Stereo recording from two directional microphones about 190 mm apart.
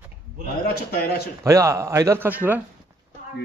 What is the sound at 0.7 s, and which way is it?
Speech, 55° left (ahead or behind).